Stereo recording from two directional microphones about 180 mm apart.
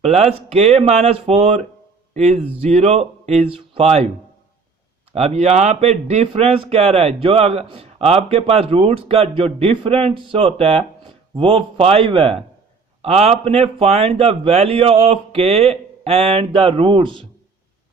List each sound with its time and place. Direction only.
0.0 s speech: 35° right (ahead or behind)
5.1 s speech: 35° right (ahead or behind)